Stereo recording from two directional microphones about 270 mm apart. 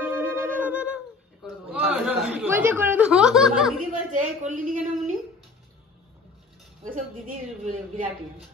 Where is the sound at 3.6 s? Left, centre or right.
Centre.